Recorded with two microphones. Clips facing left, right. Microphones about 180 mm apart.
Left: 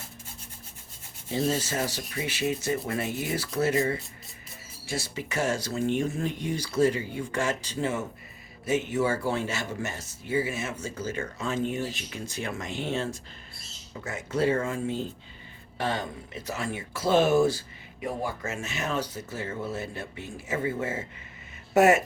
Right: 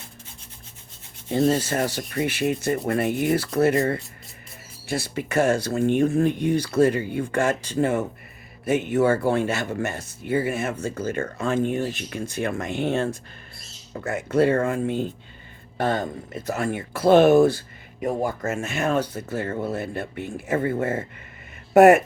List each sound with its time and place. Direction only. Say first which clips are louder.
1.3 s speech: right 7 dB; 55° right (ahead or behind)
18.0 s speech: right 7 dB; 50° right (ahead or behind)